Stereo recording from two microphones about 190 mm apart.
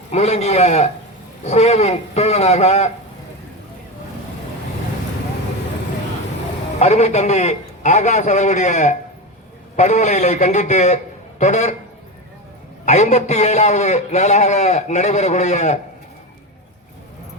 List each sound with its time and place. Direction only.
0.1 s a man's voice: 35° left (ahead or behind)
6.7 s a man's voice: 35° left (ahead or behind)
12.8 s a man's voice: 35° left (ahead or behind)